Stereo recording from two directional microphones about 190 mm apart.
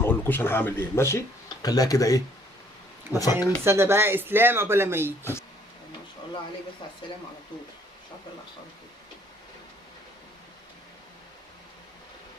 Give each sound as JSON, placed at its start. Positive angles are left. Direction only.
{"t": 0.0, "sound": "speech", "side_deg": 10}
{"t": 3.1, "sound": "speech", "side_deg": -10}